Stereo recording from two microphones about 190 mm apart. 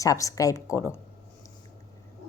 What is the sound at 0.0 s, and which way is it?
Speech, 15° left (ahead or behind).